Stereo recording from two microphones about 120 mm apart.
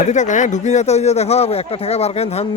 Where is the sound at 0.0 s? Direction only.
85° left.